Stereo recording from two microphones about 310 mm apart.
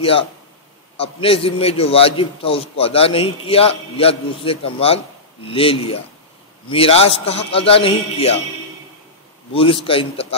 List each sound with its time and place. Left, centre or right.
0.0 s a man's voice: centre
9.5 s a man's voice: centre